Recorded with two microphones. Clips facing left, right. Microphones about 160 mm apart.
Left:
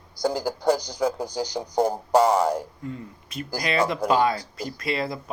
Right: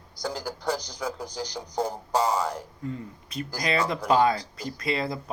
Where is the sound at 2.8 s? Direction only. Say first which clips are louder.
Even; 30° right (ahead or behind).